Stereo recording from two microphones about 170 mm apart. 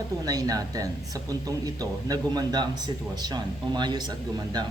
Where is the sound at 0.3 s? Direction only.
20° right (ahead or behind).